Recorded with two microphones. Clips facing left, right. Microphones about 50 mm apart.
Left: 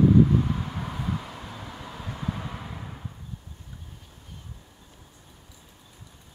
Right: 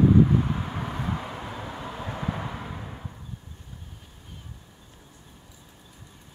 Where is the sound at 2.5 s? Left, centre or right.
Centre.